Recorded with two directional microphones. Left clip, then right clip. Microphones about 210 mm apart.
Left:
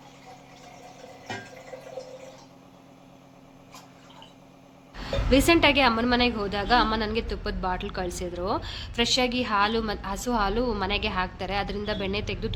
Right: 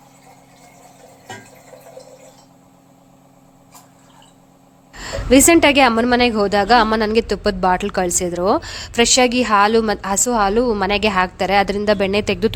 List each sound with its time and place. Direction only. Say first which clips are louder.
5.0 s a woman's voice: right 9 dB; 50° right (ahead or behind)